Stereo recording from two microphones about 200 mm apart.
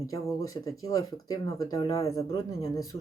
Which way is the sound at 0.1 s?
15° left (ahead or behind).